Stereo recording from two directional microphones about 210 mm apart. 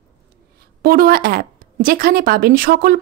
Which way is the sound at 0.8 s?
45° right (ahead or behind).